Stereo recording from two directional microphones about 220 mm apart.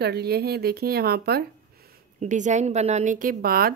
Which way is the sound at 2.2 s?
35° right (ahead or behind).